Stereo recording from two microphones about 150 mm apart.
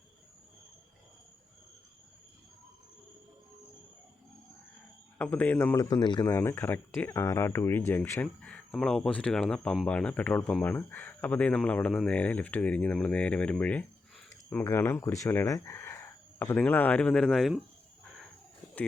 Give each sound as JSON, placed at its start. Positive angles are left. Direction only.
{"t": 5.1, "sound": "speech", "side_deg": 10}
{"t": 5.7, "sound": "a man's voice", "side_deg": 25}
{"t": 6.2, "sound": "speech", "side_deg": 15}